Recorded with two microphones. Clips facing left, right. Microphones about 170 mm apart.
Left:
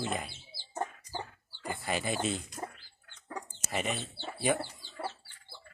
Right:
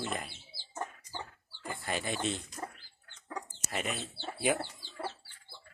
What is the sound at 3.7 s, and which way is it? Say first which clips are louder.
Speech: left 2 dB; centre (ahead or behind).